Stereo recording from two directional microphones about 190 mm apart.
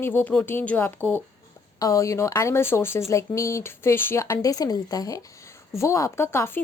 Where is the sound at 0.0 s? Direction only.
10° left (ahead or behind).